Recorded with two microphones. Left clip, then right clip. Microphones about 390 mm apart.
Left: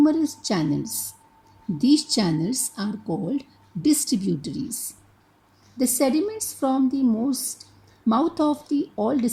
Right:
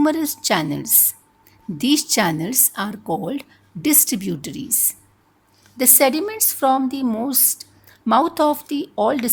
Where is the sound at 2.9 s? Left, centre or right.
Right.